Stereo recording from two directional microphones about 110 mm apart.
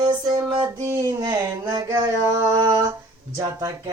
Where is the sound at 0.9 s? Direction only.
30° right (ahead or behind).